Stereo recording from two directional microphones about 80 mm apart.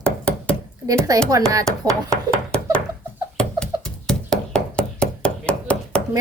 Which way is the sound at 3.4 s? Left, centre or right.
Centre.